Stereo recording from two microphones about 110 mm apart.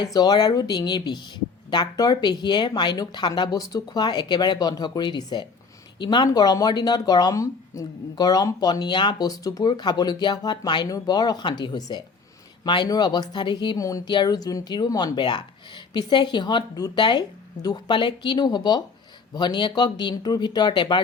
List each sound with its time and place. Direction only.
0.0 s speech: 40° left (ahead or behind)
13.7 s speech: 30° left (ahead or behind)